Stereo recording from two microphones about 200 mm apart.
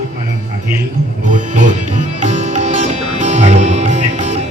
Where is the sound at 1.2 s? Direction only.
40° right (ahead or behind).